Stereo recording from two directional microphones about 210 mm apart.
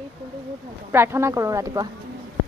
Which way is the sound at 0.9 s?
10° right (ahead or behind).